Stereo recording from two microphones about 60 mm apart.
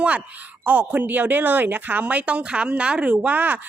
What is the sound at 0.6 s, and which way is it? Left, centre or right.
Speech, right.